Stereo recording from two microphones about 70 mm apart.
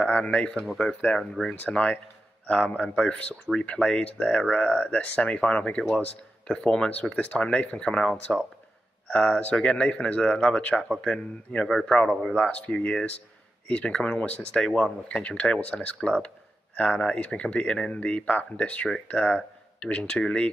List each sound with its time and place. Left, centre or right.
0.1 s a man's voice: centre
9.0 s a man's voice: centre
12.4 s speech: centre